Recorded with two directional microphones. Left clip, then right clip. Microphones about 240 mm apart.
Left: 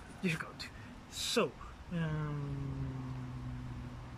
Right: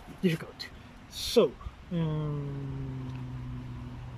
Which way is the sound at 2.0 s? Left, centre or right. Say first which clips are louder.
Right 6 dB; centre.